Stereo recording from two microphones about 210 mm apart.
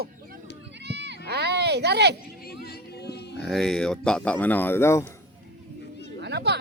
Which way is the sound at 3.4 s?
Centre (ahead or behind).